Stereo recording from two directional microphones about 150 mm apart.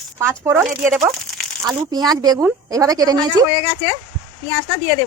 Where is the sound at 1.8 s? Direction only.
25° right (ahead or behind).